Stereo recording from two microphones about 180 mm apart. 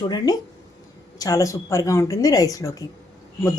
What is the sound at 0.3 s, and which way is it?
A woman's voice, 20° left (ahead or behind).